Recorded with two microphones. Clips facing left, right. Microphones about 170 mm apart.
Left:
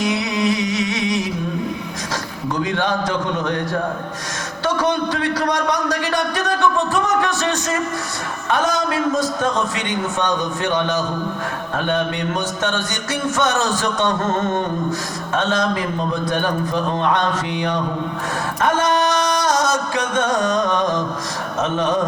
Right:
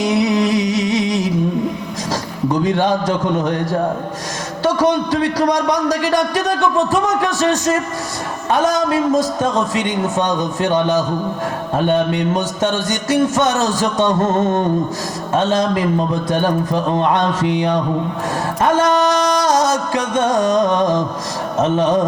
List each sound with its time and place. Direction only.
0.5 s a sound: 35° right (ahead or behind)
2.7 s a man's voice: 40° right (ahead or behind)
18.8 s a man's voice: 40° right (ahead or behind)